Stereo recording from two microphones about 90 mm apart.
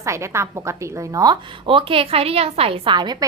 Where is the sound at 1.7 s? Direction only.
85° right.